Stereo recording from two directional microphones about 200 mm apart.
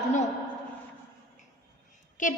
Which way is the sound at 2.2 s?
40° left (ahead or behind).